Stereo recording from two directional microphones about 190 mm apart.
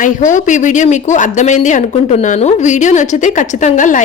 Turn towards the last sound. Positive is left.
turn(degrees=40)  # may be behind; listen again after turning